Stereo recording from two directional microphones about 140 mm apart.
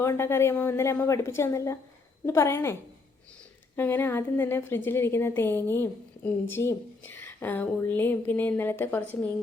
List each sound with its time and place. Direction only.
0.0 s a woman's voice: 20° left (ahead or behind)
3.8 s a woman's voice: 15° left (ahead or behind)